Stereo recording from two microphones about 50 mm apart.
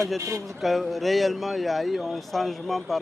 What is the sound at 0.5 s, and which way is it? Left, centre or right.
Speech, centre.